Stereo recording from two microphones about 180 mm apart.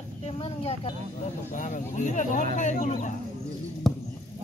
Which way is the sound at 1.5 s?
45° left (ahead or behind).